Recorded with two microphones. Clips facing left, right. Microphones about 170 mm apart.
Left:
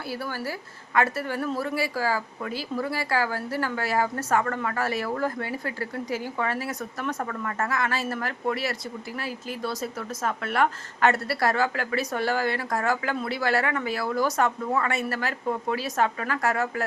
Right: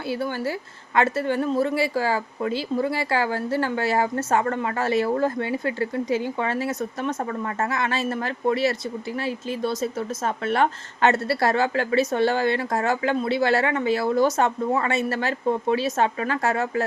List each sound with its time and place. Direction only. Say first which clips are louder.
0.1 s speech: right 6 dB; 20° right (ahead or behind)